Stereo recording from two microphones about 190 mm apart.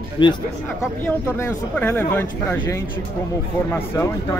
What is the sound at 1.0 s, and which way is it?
Speech, 10° left (ahead or behind).